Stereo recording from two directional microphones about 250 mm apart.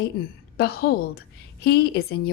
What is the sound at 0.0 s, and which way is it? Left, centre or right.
A woman's voice, left.